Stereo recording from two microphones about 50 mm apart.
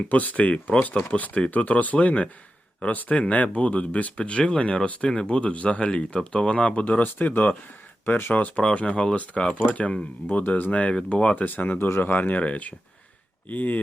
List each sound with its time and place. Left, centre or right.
0.1 s speech: left
7.0 s speech: left
8.5 s speech: left
10.9 s speech: centre
11.3 s speech: left